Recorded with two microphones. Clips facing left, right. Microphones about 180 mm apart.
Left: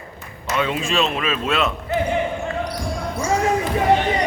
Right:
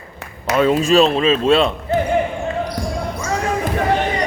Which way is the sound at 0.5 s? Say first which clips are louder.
Right 8 dB; 40° right (ahead or behind).